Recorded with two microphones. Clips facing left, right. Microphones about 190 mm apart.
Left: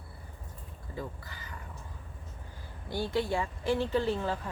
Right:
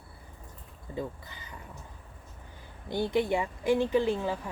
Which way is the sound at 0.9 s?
20° right (ahead or behind).